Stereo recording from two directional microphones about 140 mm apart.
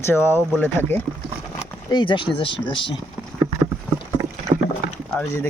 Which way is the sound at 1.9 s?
35° left (ahead or behind).